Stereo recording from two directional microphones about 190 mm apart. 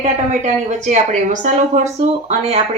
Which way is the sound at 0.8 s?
40° right (ahead or behind).